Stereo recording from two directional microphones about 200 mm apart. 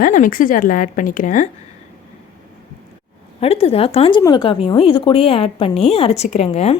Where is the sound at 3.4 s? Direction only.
30° left (ahead or behind).